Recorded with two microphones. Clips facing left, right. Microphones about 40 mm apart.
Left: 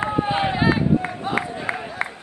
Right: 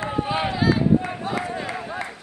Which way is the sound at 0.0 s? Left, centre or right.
Left.